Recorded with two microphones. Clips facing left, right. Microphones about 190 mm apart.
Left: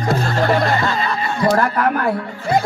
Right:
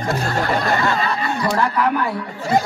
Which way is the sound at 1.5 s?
50° left (ahead or behind).